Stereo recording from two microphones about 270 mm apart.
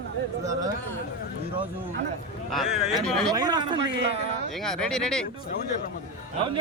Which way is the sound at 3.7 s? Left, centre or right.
Right.